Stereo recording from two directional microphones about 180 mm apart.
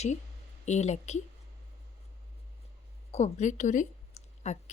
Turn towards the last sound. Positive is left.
turn(degrees=40)  # may be behind; listen again after turning